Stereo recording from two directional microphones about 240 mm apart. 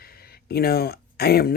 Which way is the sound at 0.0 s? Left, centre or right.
Left.